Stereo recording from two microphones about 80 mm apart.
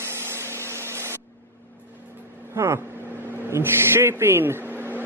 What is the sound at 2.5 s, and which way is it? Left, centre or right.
Speech, right.